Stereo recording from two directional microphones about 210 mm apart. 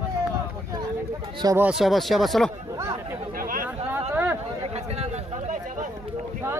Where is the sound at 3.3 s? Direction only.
40° right (ahead or behind).